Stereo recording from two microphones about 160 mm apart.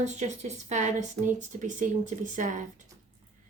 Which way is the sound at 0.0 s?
45° right (ahead or behind).